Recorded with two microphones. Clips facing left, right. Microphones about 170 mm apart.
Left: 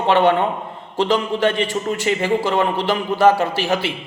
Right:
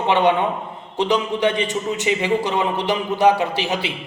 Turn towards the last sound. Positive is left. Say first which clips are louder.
# left 2 dB
turn(degrees=-15)  # may be behind; listen again after turning